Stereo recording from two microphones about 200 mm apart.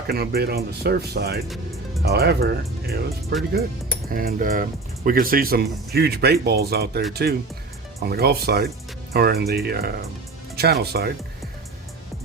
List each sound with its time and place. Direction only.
0.1 s speech: 50° right (ahead or behind)